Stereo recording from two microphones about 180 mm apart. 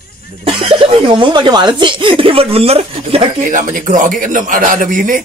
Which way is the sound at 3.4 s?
45° right (ahead or behind).